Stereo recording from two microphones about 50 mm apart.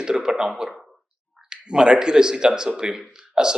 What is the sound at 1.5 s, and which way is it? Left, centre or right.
Speech, centre.